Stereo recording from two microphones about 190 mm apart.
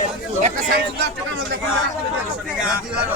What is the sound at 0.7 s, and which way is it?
Speech, 60° right (ahead or behind).